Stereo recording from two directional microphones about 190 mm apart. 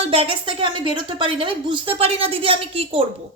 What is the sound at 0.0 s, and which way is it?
Speech, 30° right (ahead or behind).